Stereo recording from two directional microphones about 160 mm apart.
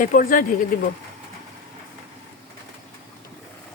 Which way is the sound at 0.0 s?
60° left (ahead or behind).